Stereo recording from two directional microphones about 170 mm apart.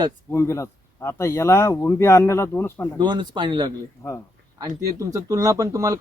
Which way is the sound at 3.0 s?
25° right (ahead or behind).